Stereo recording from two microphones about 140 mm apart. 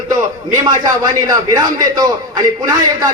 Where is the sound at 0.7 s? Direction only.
30° right (ahead or behind).